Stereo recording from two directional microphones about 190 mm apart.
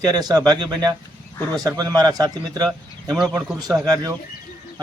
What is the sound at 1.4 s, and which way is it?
Speech, 10° left (ahead or behind).